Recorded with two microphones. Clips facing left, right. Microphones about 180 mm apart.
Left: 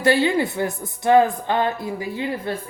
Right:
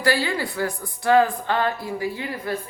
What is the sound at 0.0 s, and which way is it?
Speech, 20° left (ahead or behind).